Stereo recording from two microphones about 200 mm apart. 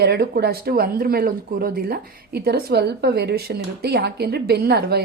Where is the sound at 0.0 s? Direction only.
55° right (ahead or behind).